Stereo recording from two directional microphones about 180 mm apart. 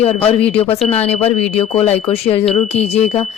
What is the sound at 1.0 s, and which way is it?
Speech, 35° left (ahead or behind).